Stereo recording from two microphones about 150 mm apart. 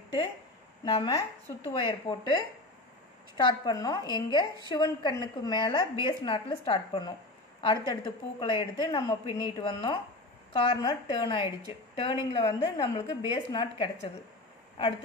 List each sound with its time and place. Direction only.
0.8 s a woman's voice: 30° left (ahead or behind)